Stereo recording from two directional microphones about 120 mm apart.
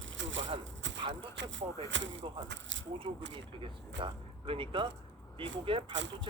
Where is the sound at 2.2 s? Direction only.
45° right (ahead or behind).